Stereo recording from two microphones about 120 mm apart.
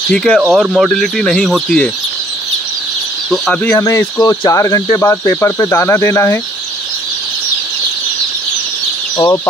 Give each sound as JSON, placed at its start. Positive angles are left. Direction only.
{"t": 0.1, "sound": "speech", "side_deg": 5}
{"t": 0.5, "sound": "speech", "side_deg": -5}
{"t": 3.6, "sound": "speech", "side_deg": 25}